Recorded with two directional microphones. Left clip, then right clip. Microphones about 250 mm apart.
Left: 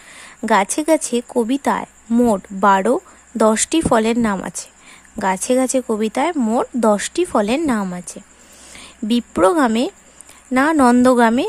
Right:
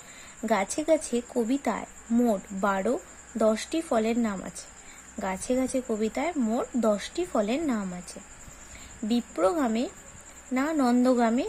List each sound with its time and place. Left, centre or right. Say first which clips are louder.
0.4 s a woman's voice: left 10 dB; centre
9.0 s a woman's voice: left 10 dB; left